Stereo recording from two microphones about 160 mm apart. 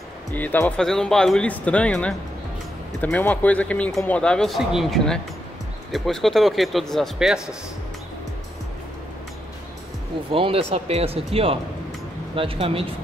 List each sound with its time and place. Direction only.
0.3 s speech: 10° left (ahead or behind)
10.3 s speech: 35° right (ahead or behind)